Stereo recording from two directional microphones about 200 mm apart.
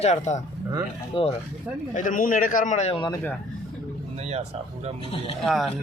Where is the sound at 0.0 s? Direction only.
35° left (ahead or behind).